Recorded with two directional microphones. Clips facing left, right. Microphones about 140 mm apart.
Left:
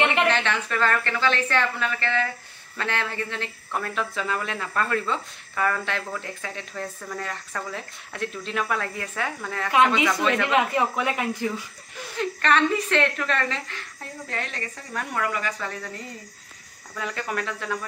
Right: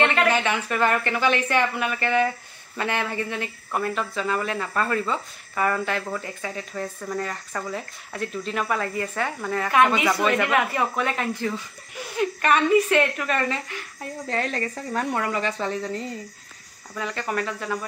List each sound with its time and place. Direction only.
0.3 s speech: 10° right (ahead or behind)
9.7 s speech: 20° left (ahead or behind)
10.2 s speech: 15° right (ahead or behind)
10.5 s speech: 15° left (ahead or behind)
12.2 s speech: 10° right (ahead or behind)
14.3 s speech: 40° right (ahead or behind)
17.0 s speech: centre (ahead or behind)